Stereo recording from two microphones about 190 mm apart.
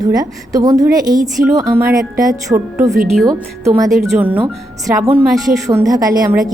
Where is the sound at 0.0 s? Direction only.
20° right (ahead or behind).